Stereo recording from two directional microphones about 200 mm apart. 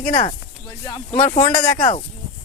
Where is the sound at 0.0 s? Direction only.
35° left (ahead or behind).